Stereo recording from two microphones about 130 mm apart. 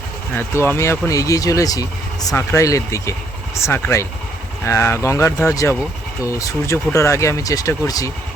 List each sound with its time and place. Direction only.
0.3 s speech: 15° left (ahead or behind)